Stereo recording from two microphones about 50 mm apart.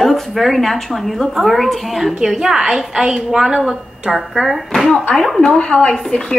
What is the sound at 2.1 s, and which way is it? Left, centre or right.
A woman's voice, centre.